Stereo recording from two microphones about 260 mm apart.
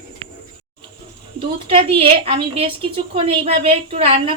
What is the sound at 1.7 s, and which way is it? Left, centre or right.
A woman's voice, right.